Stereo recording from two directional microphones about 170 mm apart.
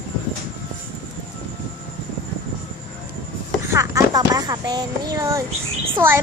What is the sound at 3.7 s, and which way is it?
A woman's voice, 20° right (ahead or behind).